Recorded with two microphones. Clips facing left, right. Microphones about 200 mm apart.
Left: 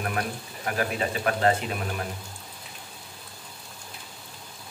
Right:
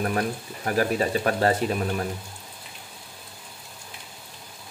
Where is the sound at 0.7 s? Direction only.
40° right (ahead or behind).